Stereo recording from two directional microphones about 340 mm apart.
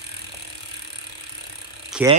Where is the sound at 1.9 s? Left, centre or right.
Centre.